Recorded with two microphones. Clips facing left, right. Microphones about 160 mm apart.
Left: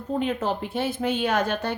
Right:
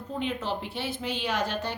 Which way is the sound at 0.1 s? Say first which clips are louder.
Left 6 dB; 50° left (ahead or behind).